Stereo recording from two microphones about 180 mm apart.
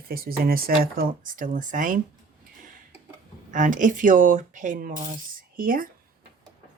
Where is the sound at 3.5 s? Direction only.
45° right (ahead or behind).